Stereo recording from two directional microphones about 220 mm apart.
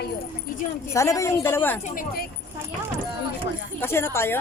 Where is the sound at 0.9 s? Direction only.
15° left (ahead or behind).